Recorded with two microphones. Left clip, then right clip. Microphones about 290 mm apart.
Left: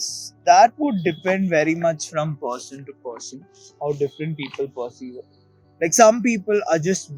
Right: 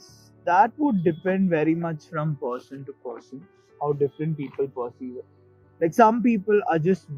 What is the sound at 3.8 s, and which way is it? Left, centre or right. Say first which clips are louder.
Speech: left 1 dB; centre.